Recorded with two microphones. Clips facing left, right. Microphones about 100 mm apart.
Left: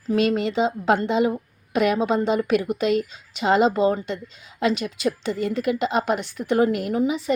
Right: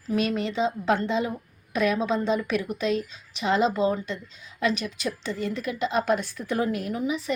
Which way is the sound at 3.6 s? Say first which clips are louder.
Left 4 dB; 40° left (ahead or behind).